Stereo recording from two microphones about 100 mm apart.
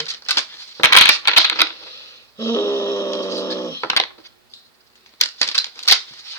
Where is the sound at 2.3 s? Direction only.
30° left (ahead or behind).